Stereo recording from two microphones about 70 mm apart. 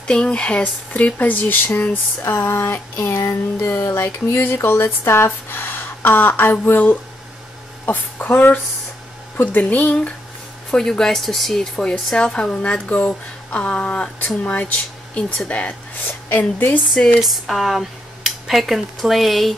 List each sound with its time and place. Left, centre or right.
0.0 s speech: centre; by 3.3 s left
3.5 s a sound: left
7.8 s speech: left
10.7 s speech: centre
16.1 s speech: left
17.2 s speech: centre